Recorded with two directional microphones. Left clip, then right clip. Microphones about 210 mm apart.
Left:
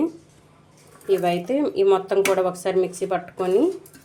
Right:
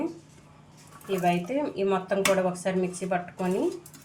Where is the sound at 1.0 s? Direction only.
40° left (ahead or behind).